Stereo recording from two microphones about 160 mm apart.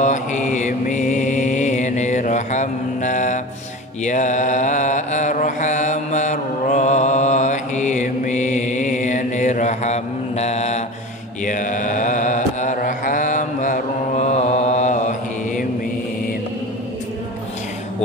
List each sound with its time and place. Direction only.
0.0 s mantra: 50° left (ahead or behind)